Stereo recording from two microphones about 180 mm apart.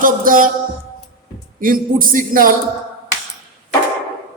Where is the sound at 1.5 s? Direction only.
50° right (ahead or behind).